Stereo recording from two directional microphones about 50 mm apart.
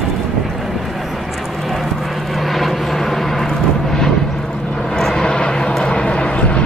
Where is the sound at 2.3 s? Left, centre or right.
Centre.